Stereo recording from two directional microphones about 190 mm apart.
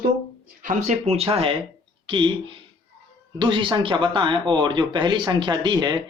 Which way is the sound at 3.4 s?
25° right (ahead or behind).